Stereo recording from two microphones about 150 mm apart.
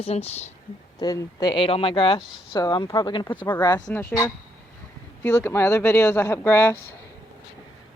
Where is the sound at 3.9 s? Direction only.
15° left (ahead or behind).